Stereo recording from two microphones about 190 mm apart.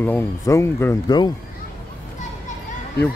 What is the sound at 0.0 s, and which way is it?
Speech, 10° left (ahead or behind).